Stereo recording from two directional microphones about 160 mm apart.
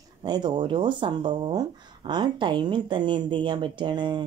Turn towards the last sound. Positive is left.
turn(degrees=-30)  # may be behind; listen again after turning